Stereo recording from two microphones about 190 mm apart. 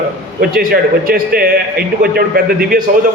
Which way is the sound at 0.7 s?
50° right (ahead or behind).